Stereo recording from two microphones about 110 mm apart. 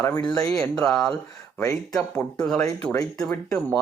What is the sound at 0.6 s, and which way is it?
Speech, 5° left (ahead or behind).